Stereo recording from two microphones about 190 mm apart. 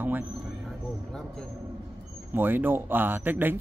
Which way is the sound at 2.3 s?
10° right (ahead or behind).